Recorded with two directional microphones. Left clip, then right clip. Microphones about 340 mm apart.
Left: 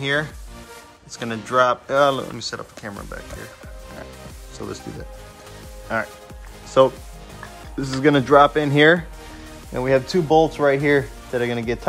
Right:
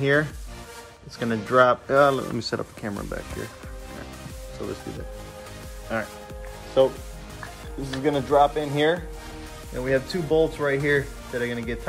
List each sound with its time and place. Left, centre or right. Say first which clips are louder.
0.0 s speech: right 1 dB; centre
5.9 s speech: left 4 dB; centre